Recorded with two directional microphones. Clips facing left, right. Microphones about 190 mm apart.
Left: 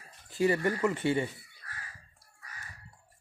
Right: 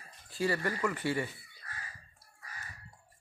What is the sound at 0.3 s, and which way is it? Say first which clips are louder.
Speech: left 5 dB; 20° left (ahead or behind).